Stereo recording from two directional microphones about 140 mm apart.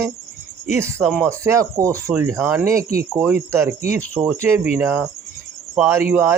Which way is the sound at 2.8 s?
90° right.